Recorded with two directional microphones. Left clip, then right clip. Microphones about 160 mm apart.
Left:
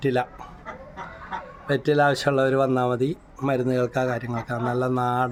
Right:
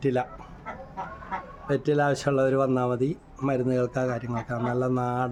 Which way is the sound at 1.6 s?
10° left (ahead or behind).